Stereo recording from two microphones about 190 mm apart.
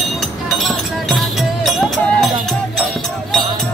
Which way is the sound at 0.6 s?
Centre (ahead or behind).